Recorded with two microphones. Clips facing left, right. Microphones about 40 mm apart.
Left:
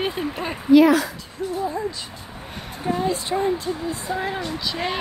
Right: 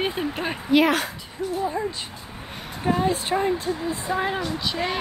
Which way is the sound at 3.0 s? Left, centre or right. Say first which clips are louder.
Even; right.